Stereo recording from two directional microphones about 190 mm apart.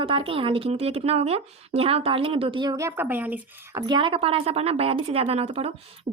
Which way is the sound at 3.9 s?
25° right (ahead or behind).